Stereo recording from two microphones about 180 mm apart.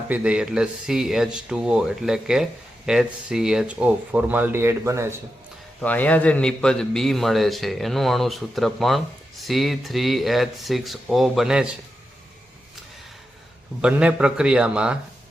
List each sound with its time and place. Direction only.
0.1 s a man's voice: 5° right (ahead or behind)
5.8 s a man's voice: 10° left (ahead or behind)
13.8 s a man's voice: 5° right (ahead or behind)